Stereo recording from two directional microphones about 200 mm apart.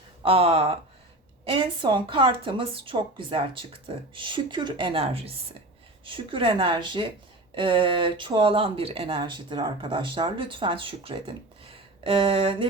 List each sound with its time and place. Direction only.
0.2 s speech: 30° right (ahead or behind)